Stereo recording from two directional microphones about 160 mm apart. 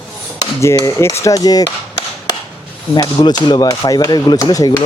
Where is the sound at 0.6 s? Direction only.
20° left (ahead or behind).